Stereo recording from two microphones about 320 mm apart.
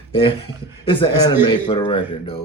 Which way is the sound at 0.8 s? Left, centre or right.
Centre.